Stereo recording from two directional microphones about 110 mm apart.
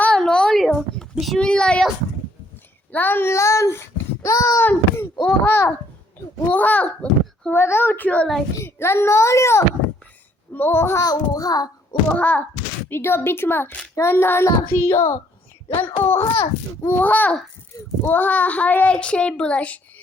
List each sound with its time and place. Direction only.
0.0 s a sound: 5° left (ahead or behind)
2.9 s speech: 15° left (ahead or behind)
4.6 s a child's voice: 20° left (ahead or behind)
7.5 s a child's voice: 20° left (ahead or behind)
11.0 s a child's voice: 35° left (ahead or behind)
12.0 s a child's voice: 15° left (ahead or behind)